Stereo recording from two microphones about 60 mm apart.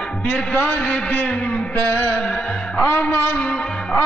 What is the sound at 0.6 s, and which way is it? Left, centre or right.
Music, left.